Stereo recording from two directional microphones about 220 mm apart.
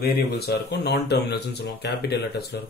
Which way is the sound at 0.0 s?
45° left (ahead or behind).